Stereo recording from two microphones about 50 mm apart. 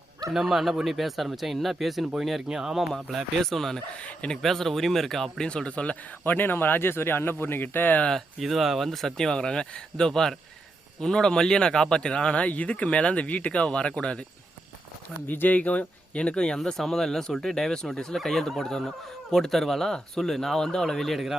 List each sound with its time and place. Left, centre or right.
0.3 s speech: centre
2.9 s speech: centre
4.0 s speech: left
4.4 s speech: centre
5.5 s speech: left
6.2 s speech: left
8.4 s speech: centre; by 14.3 s left
15.3 s a man's voice: left; by 21.3 s centre